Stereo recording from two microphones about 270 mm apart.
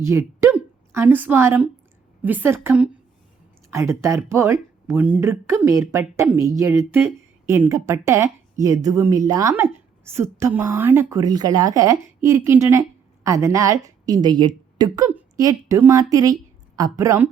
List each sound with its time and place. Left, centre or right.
0.0 s a woman's voice: centre